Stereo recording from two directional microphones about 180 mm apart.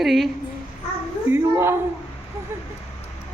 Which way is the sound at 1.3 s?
15° right (ahead or behind).